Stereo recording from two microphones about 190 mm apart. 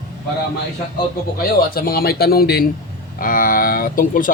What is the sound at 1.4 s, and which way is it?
Speech, 50° left (ahead or behind).